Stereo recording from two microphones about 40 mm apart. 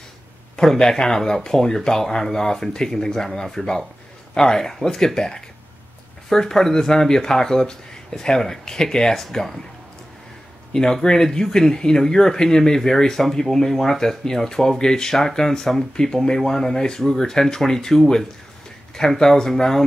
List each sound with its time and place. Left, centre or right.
0.6 s speech: centre
10.7 s speech: centre